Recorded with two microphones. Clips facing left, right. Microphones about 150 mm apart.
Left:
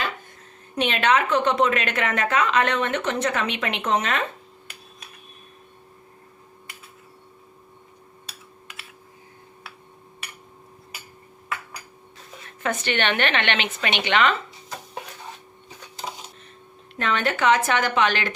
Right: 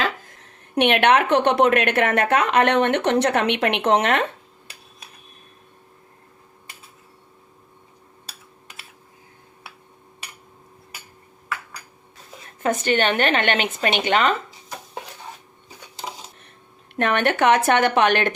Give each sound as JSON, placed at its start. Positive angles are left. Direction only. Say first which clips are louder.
{"t": 0.0, "sound": "speech", "louder": "right 5 dB", "side_deg": -80}
{"t": 12.6, "sound": "speech", "louder": "right 4 dB", "side_deg": -40}
{"t": 16.9, "sound": "speech", "louder": "right 4 dB", "side_deg": -60}